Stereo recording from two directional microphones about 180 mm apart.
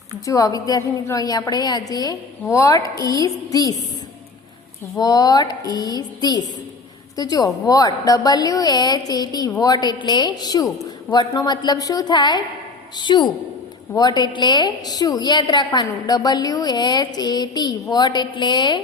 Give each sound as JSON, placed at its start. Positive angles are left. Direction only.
{"t": 0.3, "sound": "a woman's voice", "side_deg": 20}
{"t": 4.9, "sound": "a woman's voice", "side_deg": 20}